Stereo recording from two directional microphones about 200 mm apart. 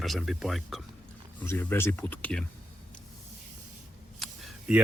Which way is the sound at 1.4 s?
10° left (ahead or behind).